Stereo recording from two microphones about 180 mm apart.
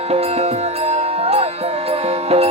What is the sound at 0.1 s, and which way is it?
Music, 35° right (ahead or behind).